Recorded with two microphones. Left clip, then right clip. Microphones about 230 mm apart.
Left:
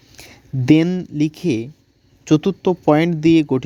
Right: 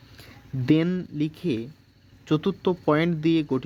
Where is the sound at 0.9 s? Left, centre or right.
Left.